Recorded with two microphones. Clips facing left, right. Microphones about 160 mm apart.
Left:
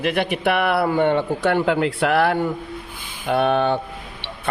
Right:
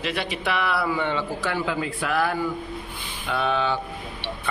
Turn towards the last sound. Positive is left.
turn(degrees=55)  # may be behind; listen again after turning